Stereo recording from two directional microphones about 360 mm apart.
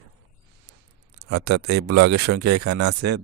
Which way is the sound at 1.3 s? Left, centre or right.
Right.